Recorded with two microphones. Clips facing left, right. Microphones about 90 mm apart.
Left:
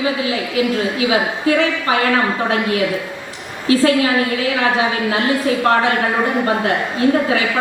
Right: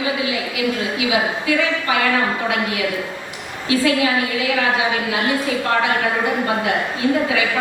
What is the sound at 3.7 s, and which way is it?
Speech, 35° left (ahead or behind).